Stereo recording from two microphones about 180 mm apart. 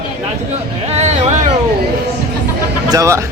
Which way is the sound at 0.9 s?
40° right (ahead or behind).